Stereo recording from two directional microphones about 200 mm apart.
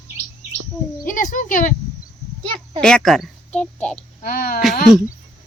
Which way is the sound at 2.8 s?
Centre (ahead or behind).